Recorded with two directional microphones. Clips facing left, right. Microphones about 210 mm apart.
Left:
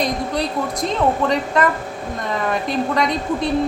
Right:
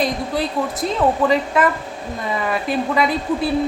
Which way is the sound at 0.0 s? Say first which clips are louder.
Even; 5° right (ahead or behind).